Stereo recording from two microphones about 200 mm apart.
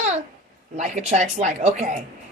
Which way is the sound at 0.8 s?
35° right (ahead or behind).